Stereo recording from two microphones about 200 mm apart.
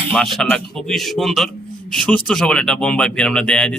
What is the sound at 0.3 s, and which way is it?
Speech, centre (ahead or behind).